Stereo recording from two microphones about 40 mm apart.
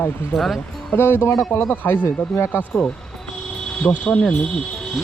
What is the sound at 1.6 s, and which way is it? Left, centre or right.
Speech, left.